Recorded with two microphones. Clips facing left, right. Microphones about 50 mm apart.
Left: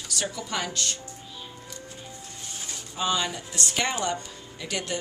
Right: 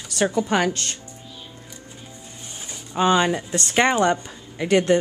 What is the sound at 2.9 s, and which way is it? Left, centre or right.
A woman's voice, right.